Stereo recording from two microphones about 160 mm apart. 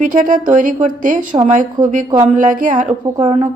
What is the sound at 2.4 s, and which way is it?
Speech, 55° right (ahead or behind).